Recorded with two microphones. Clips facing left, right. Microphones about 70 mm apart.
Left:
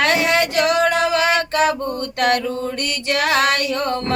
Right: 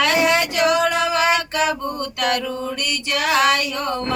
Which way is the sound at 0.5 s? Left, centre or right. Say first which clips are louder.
Left 1 dB; left.